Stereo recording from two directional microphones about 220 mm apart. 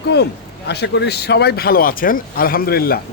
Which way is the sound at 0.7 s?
50° left (ahead or behind).